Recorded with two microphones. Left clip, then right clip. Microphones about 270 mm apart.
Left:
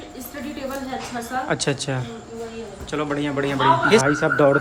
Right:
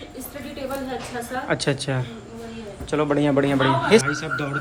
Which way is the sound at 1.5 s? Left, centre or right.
Centre.